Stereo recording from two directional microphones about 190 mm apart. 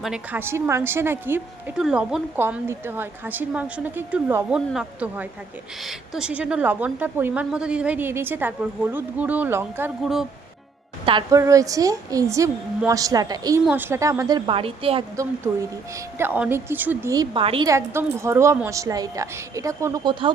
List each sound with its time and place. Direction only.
0.0 s a woman's voice: 5° right (ahead or behind)
10.0 s speech: centre (ahead or behind)
11.0 s a woman's voice: 20° right (ahead or behind)
16.1 s a woman's voice: 10° right (ahead or behind)
17.3 s a woman's voice: 30° right (ahead or behind)
17.7 s a woman's voice: 15° right (ahead or behind)